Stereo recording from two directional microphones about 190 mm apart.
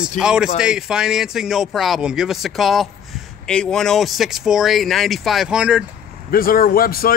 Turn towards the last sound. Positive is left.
turn(degrees=50)  # may be behind; listen again after turning